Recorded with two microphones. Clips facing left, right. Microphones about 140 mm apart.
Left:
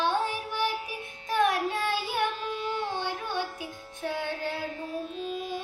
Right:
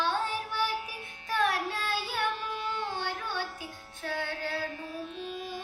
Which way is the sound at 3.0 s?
15° left (ahead or behind).